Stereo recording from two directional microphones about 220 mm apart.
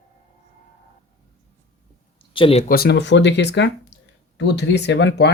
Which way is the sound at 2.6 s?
45° left (ahead or behind).